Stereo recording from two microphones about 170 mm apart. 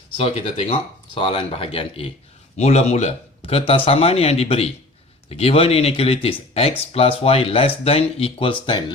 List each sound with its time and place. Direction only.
0.2 s speech: 35° left (ahead or behind)